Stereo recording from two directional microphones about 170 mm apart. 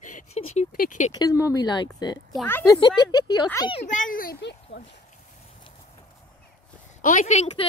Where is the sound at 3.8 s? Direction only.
50° left (ahead or behind).